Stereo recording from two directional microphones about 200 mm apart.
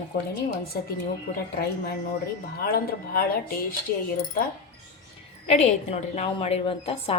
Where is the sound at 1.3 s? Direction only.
45° left (ahead or behind).